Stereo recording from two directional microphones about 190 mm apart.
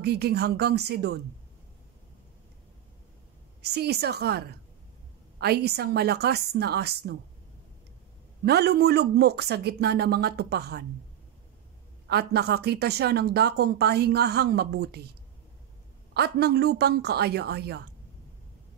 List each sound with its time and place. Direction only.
0.0 s a woman's voice: 60° right (ahead or behind)
3.6 s a woman's voice: 60° right (ahead or behind)
8.5 s a woman's voice: 60° right (ahead or behind)
12.1 s a woman's voice: 60° right (ahead or behind)
16.1 s a woman's voice: 60° right (ahead or behind)